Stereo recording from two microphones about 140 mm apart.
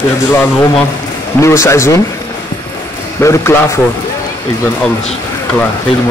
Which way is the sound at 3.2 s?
20° left (ahead or behind).